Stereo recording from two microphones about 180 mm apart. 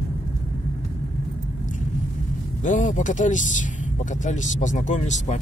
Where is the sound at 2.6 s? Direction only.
45° left (ahead or behind).